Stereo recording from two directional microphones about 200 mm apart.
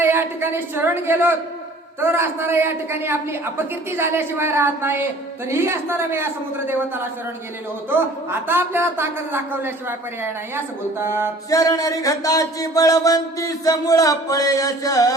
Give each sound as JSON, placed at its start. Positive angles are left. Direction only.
{"t": 0.0, "sound": "a man's voice", "side_deg": -10}
{"t": 11.0, "sound": "a man's voice", "side_deg": -10}
{"t": 11.5, "sound": "speech", "side_deg": 15}